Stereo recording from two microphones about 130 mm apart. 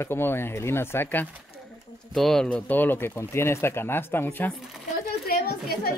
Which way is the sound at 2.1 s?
5° left (ahead or behind).